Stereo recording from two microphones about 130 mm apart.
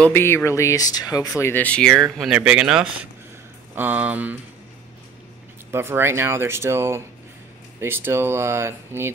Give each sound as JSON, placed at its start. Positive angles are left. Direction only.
{"t": 0.0, "sound": "speech", "side_deg": 15}
{"t": 1.4, "sound": "speech", "side_deg": 15}
{"t": 2.1, "sound": "speech", "side_deg": -5}
{"t": 5.7, "sound": "speech", "side_deg": -20}